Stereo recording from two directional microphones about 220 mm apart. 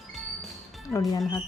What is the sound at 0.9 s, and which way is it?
Speech, 15° left (ahead or behind).